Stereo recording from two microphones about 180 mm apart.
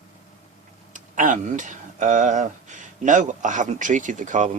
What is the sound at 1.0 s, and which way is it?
Speech, 45° right (ahead or behind).